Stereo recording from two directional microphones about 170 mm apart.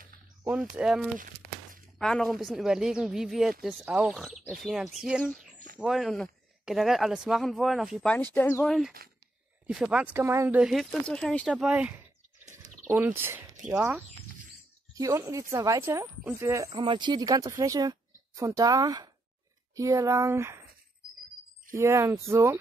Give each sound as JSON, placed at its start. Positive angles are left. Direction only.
{"t": 0.5, "sound": "speech", "side_deg": -5}
{"t": 9.0, "sound": "a sound", "side_deg": -65}
{"t": 9.7, "sound": "speech", "side_deg": -5}
{"t": 10.6, "sound": "speech", "side_deg": 0}
{"t": 13.0, "sound": "speech", "side_deg": -15}
{"t": 15.0, "sound": "speech", "side_deg": -20}
{"t": 16.7, "sound": "speech", "side_deg": -30}
{"t": 21.7, "sound": "speech", "side_deg": -15}